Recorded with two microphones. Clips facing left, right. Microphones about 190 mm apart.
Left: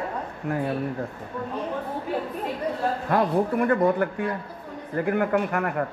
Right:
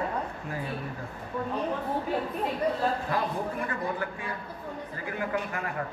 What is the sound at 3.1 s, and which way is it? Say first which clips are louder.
Speech: left 8 dB; 65° left (ahead or behind).